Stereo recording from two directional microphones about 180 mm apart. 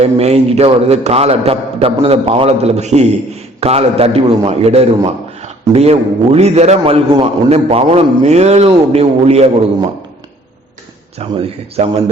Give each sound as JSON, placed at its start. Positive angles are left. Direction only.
{"t": 0.0, "sound": "a man's voice", "side_deg": -35}
{"t": 11.2, "sound": "a man's voice", "side_deg": -35}